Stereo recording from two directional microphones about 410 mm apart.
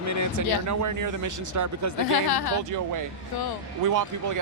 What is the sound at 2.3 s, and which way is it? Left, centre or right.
Speech, left.